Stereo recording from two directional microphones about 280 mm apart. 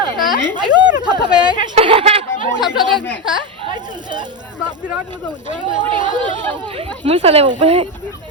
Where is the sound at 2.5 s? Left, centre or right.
Centre.